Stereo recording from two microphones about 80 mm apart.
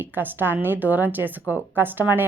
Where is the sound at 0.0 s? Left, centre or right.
Right.